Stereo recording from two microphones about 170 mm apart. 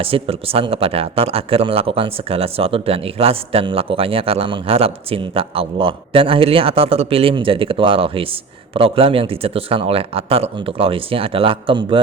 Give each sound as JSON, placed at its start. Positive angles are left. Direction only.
{"t": 0.0, "sound": "speech", "side_deg": -35}